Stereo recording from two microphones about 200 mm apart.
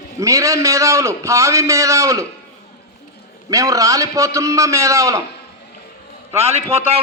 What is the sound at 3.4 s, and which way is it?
A man's voice, 15° right (ahead or behind).